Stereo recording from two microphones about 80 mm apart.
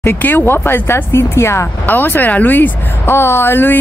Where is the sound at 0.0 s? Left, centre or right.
Left.